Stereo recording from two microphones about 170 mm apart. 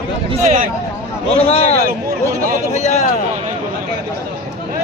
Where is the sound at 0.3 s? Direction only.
45° right (ahead or behind).